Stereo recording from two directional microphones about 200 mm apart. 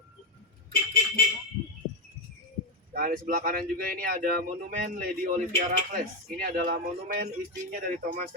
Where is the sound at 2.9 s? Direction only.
45° right (ahead or behind).